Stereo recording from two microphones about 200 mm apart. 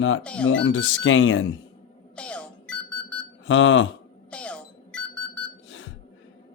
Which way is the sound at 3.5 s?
70° left (ahead or behind).